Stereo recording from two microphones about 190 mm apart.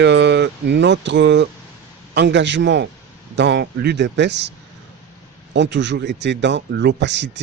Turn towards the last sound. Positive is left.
turn(degrees=-70)  # may be behind; listen again after turning